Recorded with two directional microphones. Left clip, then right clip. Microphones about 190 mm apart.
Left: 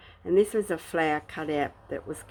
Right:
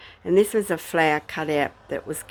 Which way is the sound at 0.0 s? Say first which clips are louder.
Right 4 dB; 30° right (ahead or behind).